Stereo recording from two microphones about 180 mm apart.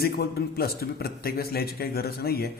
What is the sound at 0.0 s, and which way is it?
A man's voice, 60° left (ahead or behind).